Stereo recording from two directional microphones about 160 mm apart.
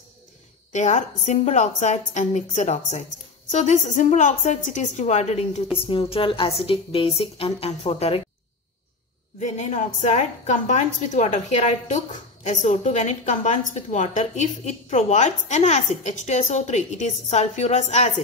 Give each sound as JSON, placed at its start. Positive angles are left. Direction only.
{"t": 0.7, "sound": "a woman's voice", "side_deg": 45}
{"t": 9.4, "sound": "a woman's voice", "side_deg": 45}